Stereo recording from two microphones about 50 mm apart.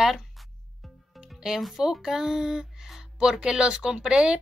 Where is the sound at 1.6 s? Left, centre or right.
Centre.